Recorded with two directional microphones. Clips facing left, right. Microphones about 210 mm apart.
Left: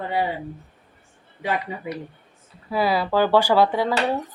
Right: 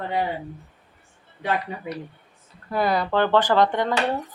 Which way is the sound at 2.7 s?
5° left (ahead or behind).